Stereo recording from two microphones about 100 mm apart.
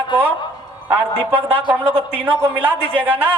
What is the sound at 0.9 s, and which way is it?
A man's voice, 15° right (ahead or behind).